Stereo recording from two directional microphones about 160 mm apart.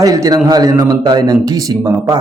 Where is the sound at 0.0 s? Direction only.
20° right (ahead or behind).